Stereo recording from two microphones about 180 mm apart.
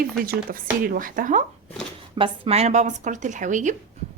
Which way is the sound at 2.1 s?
30° right (ahead or behind).